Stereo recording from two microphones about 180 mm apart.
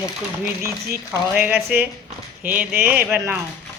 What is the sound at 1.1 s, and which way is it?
A woman's voice, 10° right (ahead or behind).